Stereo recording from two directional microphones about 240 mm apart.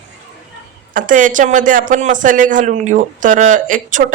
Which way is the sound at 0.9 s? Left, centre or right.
Right.